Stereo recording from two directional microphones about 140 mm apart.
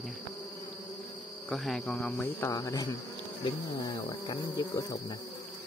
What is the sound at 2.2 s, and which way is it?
Cricket, 20° left (ahead or behind).